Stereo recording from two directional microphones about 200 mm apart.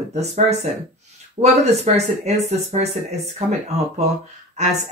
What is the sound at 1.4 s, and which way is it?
Speech, 35° right (ahead or behind).